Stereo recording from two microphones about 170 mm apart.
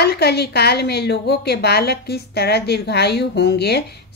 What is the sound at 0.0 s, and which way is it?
A woman's voice, 70° left (ahead or behind).